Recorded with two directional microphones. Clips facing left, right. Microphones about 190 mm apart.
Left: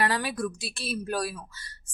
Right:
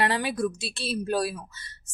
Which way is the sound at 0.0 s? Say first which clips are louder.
Right 2 dB; 25° right (ahead or behind).